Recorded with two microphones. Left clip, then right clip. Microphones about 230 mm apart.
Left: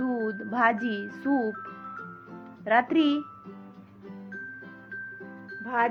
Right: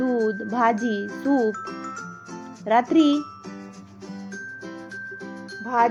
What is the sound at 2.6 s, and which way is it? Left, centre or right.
Speech, centre.